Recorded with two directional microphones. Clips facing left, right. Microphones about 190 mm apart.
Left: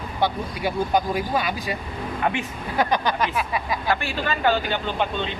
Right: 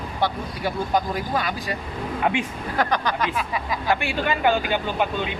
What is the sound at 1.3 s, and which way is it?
Speech, 20° left (ahead or behind).